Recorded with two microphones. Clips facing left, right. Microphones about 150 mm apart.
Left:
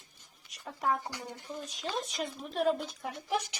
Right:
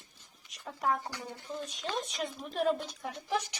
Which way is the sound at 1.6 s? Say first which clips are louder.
Even; centre (ahead or behind).